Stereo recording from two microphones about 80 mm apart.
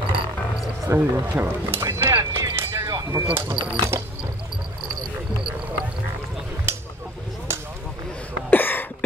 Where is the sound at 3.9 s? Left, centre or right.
Right.